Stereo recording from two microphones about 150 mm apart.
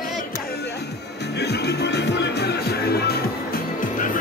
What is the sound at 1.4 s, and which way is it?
Music, 90° left.